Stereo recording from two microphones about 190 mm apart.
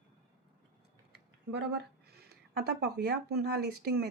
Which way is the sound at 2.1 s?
55° right (ahead or behind).